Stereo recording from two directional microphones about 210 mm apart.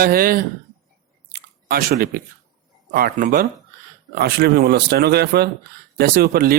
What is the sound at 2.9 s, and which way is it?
Speech, 45° right (ahead or behind).